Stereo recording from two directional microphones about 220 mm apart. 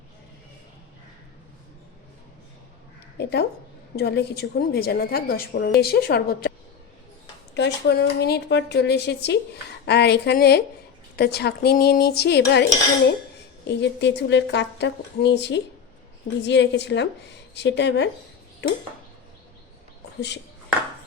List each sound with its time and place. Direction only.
3.2 s speech: 50° left (ahead or behind)
7.5 s speech: 50° left (ahead or behind)
13.7 s speech: 50° left (ahead or behind)